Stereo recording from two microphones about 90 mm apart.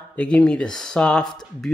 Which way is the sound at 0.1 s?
10° left (ahead or behind).